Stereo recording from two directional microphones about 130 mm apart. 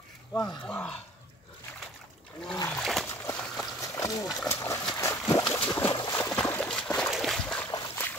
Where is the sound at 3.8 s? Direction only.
25° left (ahead or behind).